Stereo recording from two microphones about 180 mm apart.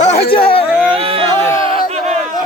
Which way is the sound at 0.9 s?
30° right (ahead or behind).